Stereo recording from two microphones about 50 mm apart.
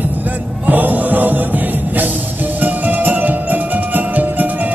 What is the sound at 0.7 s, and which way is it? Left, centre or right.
Music, right.